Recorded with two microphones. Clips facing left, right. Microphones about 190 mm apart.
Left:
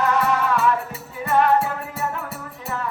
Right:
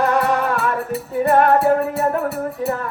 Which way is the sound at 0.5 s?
55° right (ahead or behind).